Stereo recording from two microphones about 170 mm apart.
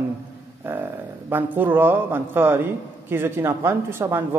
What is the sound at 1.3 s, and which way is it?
Speech, 10° right (ahead or behind).